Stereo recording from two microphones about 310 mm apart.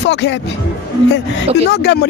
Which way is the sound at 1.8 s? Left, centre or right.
Left.